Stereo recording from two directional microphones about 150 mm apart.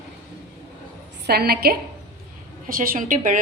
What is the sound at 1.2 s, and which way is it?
Speech, 90° right.